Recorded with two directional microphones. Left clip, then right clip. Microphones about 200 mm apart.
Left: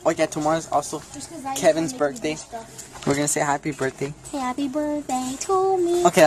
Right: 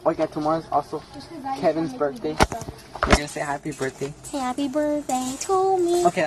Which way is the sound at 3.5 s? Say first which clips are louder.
Left 4 dB; 20° left (ahead or behind).